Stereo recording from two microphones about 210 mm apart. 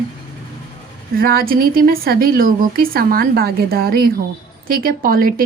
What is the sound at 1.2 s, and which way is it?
Speech, 45° right (ahead or behind).